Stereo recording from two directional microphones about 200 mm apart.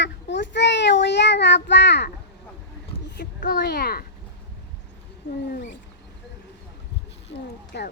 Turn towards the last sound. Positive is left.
turn(degrees=60)  # may be behind; listen again after turning